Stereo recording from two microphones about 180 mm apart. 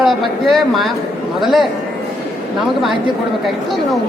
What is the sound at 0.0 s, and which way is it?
A woman's voice, centre (ahead or behind).